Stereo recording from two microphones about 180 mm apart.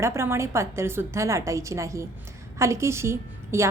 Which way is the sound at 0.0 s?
15° right (ahead or behind).